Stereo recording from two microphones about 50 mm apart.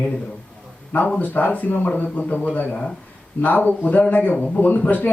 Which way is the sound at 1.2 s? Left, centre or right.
Left.